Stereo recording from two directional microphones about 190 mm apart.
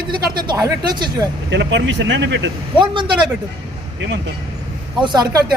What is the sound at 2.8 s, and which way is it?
Speech, 25° right (ahead or behind).